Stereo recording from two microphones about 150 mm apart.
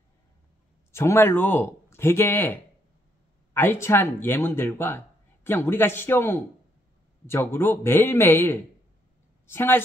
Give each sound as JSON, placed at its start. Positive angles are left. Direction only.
{"t": 0.9, "sound": "speech", "side_deg": 15}